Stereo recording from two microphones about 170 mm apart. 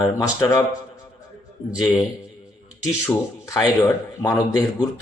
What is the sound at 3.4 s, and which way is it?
A man's voice, 20° left (ahead or behind).